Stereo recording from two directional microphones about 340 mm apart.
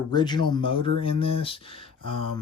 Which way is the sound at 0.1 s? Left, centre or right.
Centre.